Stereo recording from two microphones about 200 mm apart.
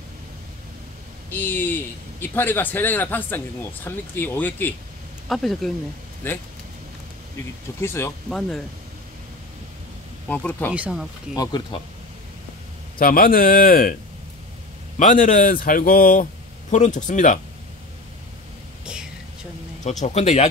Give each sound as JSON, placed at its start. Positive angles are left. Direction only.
{"t": 1.3, "sound": "speech", "side_deg": 10}
{"t": 7.8, "sound": "speech", "side_deg": 10}
{"t": 10.2, "sound": "speech", "side_deg": 5}
{"t": 10.7, "sound": "speech", "side_deg": -5}
{"t": 13.0, "sound": "speech", "side_deg": 45}
{"t": 15.0, "sound": "speech", "side_deg": 40}
{"t": 19.8, "sound": "speech", "side_deg": 35}